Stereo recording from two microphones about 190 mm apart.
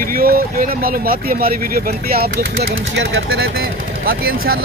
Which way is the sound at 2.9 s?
70° right (ahead or behind).